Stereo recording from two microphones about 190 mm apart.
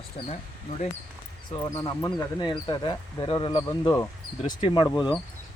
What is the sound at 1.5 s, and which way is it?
Speech, 20° left (ahead or behind).